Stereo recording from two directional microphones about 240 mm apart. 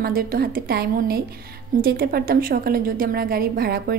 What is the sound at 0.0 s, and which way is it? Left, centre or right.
A woman's voice, right.